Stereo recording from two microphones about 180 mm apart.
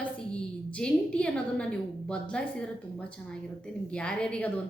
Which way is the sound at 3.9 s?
5° left (ahead or behind).